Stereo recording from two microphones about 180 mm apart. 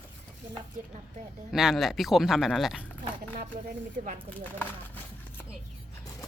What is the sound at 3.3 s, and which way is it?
Speech, 50° right (ahead or behind).